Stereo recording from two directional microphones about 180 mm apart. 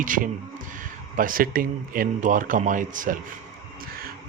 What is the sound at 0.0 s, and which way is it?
Speech, 50° right (ahead or behind).